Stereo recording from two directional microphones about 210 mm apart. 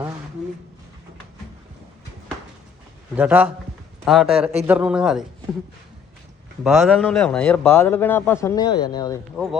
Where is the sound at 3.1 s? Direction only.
5° right (ahead or behind).